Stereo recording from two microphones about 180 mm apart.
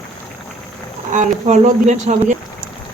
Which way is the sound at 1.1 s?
40° right (ahead or behind).